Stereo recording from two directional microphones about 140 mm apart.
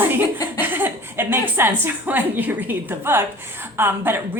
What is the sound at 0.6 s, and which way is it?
A woman's voice, 15° right (ahead or behind).